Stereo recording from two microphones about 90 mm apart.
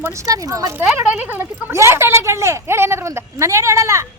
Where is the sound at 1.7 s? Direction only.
30° right (ahead or behind).